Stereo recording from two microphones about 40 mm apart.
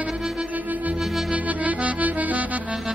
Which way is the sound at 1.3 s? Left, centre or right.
Right.